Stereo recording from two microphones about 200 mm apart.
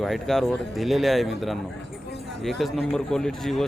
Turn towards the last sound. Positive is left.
turn(degrees=0)  # may be behind; listen again after turning